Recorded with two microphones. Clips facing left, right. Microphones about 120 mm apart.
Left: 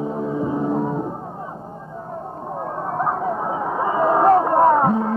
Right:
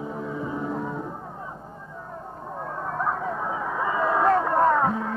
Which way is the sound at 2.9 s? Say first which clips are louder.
Left 5 dB; 30° left (ahead or behind).